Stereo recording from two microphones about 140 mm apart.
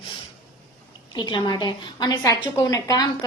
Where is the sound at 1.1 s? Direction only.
30° left (ahead or behind).